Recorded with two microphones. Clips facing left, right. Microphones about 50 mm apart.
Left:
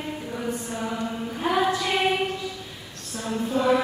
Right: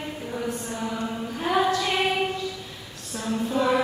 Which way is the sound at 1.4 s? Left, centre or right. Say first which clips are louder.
Even; centre.